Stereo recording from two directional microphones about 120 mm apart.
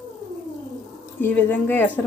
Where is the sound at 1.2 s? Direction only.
15° left (ahead or behind).